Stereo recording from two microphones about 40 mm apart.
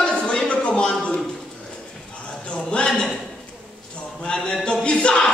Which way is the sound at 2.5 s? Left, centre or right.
Left.